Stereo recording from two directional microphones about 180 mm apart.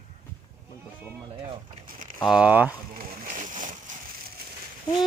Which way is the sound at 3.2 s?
45° right (ahead or behind).